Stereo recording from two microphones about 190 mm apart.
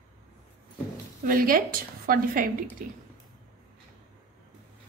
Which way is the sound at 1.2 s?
50° right (ahead or behind).